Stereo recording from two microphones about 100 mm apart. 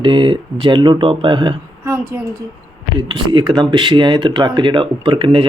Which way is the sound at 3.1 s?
50° right (ahead or behind).